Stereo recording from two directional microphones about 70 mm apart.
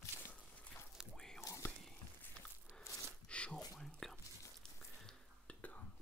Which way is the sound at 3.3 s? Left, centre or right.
Centre.